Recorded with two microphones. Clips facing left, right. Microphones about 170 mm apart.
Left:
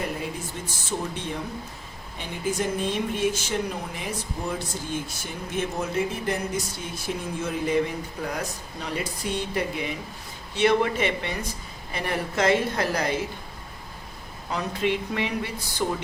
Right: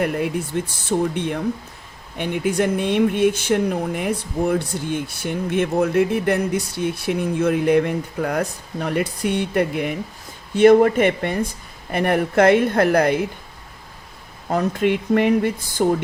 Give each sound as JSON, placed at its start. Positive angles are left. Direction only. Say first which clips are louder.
{"t": 0.0, "sound": "speech", "louder": "right 9 dB", "side_deg": -60}
{"t": 14.5, "sound": "speech", "louder": "right 7 dB", "side_deg": -50}